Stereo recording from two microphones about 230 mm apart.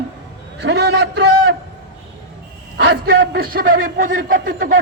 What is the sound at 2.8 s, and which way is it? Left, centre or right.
A man's voice, right.